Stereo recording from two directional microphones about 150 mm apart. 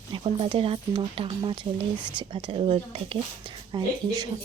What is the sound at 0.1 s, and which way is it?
Speech, 35° right (ahead or behind).